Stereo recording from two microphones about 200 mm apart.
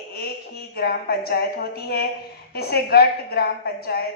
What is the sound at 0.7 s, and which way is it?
A woman's voice, 50° left (ahead or behind).